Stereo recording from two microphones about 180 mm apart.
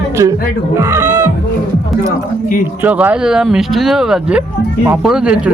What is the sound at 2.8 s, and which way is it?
Speech, 10° right (ahead or behind).